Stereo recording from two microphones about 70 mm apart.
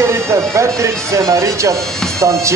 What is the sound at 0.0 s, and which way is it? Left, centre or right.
Speech, right.